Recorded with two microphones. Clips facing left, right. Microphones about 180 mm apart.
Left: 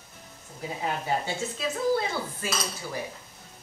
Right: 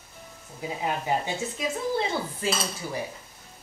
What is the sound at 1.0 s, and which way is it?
Speech, 15° right (ahead or behind).